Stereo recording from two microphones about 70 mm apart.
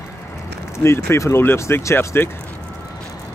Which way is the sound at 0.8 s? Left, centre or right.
Left.